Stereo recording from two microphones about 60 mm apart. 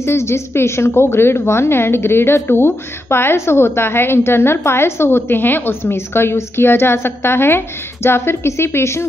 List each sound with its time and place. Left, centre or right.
0.0 s a woman's voice: left